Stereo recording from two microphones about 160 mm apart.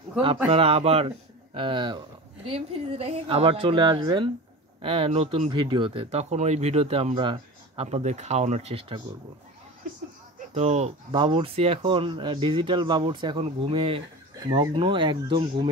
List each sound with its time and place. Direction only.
0.5 s speech: 35° right (ahead or behind)
10.5 s speech: 40° right (ahead or behind)
11.1 s speech: 30° right (ahead or behind)